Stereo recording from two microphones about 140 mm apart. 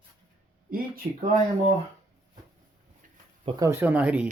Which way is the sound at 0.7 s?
90° right.